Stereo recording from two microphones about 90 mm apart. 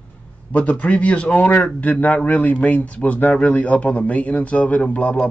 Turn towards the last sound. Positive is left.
turn(degrees=15)  # may be behind; listen again after turning